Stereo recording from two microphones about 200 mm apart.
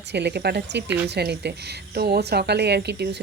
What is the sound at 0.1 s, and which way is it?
Speech, 60° right (ahead or behind).